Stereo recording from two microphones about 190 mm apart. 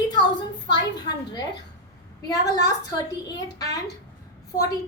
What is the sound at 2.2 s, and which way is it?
A woman's voice, 20° left (ahead or behind).